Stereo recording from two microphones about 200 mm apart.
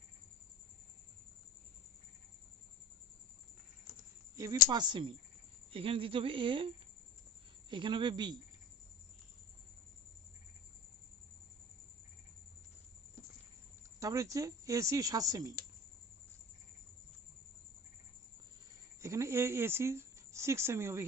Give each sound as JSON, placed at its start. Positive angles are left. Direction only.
{"t": 4.7, "sound": "speech", "side_deg": -20}
{"t": 14.0, "sound": "speech", "side_deg": -15}
{"t": 19.0, "sound": "speech", "side_deg": -15}